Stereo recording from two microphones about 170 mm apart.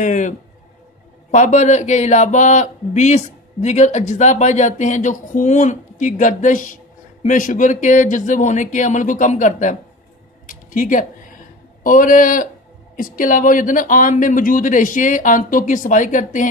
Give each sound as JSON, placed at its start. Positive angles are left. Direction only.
{"t": 0.0, "sound": "speech", "side_deg": 50}
{"t": 10.4, "sound": "a sound", "side_deg": 50}
{"t": 11.8, "sound": "speech", "side_deg": 50}